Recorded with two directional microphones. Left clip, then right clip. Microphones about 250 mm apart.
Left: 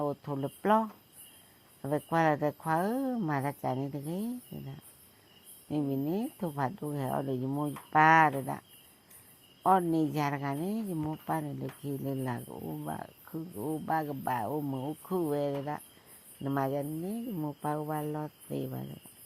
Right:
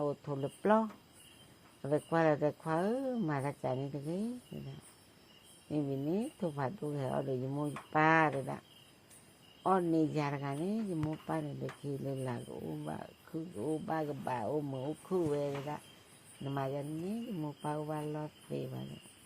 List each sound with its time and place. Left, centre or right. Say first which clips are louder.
0.0 s speech: left 2 dB; left
5.7 s speech: left 3 dB; left
9.6 s speech: left 4 dB; left